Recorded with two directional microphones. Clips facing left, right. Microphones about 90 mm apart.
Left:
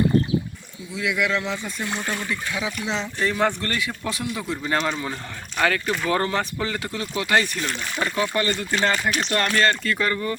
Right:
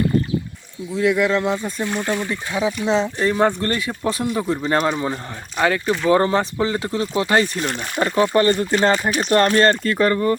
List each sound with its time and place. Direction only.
0.9 s speech: 35° right (ahead or behind)
2.2 s speech: 30° right (ahead or behind)
4.5 s speech: 30° right (ahead or behind)